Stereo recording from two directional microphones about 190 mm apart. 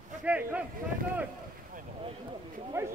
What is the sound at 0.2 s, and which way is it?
Speech, 10° right (ahead or behind).